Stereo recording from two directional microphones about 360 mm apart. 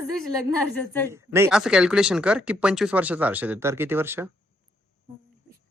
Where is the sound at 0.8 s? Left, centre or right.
Centre.